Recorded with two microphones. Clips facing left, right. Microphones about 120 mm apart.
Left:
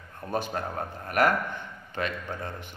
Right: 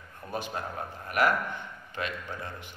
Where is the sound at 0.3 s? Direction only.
45° left (ahead or behind).